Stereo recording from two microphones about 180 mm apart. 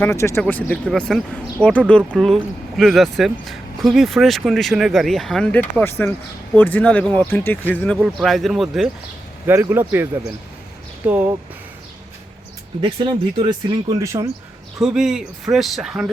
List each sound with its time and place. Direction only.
0.0 s speech: 15° left (ahead or behind)
7.9 s speech: centre (ahead or behind)
9.5 s speech: 15° right (ahead or behind)
12.8 s speech: 30° right (ahead or behind)
14.0 s speech: 15° right (ahead or behind)
14.8 s speech: 5° right (ahead or behind)